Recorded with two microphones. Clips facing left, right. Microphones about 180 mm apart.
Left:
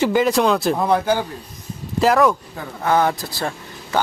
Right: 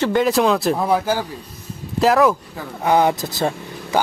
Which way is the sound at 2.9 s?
15° right (ahead or behind).